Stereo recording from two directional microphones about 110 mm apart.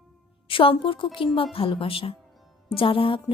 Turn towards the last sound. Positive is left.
turn(degrees=50)  # may be behind; listen again after turning